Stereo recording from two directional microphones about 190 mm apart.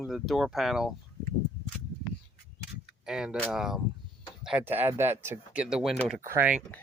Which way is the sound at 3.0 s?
5° right (ahead or behind).